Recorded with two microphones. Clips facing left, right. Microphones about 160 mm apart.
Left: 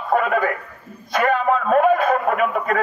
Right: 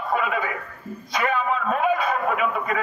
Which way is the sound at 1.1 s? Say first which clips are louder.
Left 5 dB; 50° left (ahead or behind).